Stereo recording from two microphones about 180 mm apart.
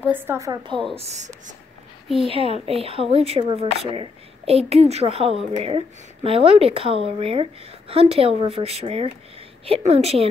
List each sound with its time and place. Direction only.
0.0 s a woman's voice: 10° right (ahead or behind)
0.9 s speech: 40° right (ahead or behind)